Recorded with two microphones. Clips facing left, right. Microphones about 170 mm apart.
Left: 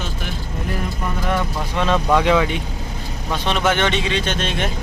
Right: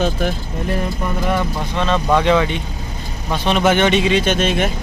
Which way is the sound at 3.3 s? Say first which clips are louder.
Right 4 dB; 10° right (ahead or behind).